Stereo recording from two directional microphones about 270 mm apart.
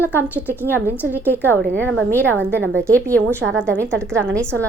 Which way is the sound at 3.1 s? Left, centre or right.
Centre.